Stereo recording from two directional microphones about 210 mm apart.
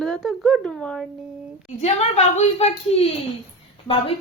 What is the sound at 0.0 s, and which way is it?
Speech, centre (ahead or behind).